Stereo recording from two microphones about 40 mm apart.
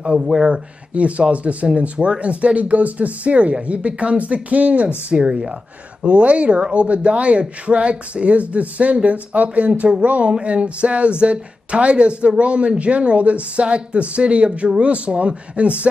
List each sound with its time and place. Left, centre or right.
0.0 s speech: right